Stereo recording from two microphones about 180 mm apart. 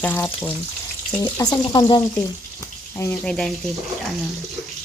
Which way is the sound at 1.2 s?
20° left (ahead or behind).